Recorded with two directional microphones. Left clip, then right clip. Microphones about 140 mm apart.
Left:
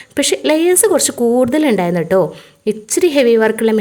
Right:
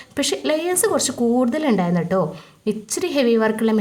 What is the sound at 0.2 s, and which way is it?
A woman's voice, 20° left (ahead or behind).